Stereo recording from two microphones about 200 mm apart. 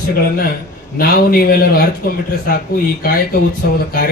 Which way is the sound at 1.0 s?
50° left (ahead or behind).